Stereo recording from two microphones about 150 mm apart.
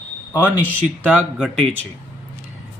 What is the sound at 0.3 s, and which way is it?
Speech, 10° left (ahead or behind).